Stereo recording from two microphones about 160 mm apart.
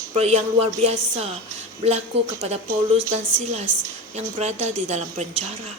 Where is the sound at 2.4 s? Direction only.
40° right (ahead or behind).